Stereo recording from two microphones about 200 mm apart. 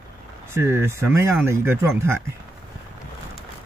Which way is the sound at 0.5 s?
10° right (ahead or behind).